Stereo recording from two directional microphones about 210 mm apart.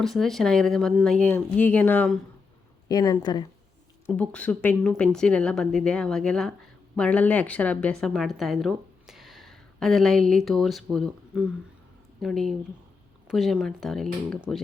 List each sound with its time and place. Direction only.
0.0 s speech: centre (ahead or behind)
2.9 s speech: 15° left (ahead or behind)
4.0 s a woman's voice: 5° left (ahead or behind)